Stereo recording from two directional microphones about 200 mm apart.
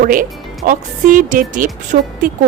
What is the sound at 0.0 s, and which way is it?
Speech, 45° right (ahead or behind).